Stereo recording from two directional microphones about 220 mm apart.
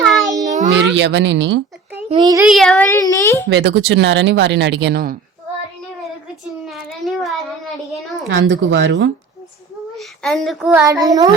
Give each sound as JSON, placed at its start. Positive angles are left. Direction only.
{"t": 0.3, "sound": "child singing", "side_deg": -35}
{"t": 0.9, "sound": "speech", "side_deg": -55}
{"t": 2.0, "sound": "a child's voice", "side_deg": -20}
{"t": 2.4, "sound": "a child's voice", "side_deg": 0}
{"t": 3.5, "sound": "speech", "side_deg": -50}
{"t": 6.7, "sound": "child singing", "side_deg": 0}
{"t": 8.3, "sound": "speech", "side_deg": -55}
{"t": 10.0, "sound": "speech", "side_deg": 0}
{"t": 10.7, "sound": "a child's voice", "side_deg": -10}